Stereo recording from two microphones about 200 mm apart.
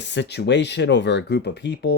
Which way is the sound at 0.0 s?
60° left (ahead or behind).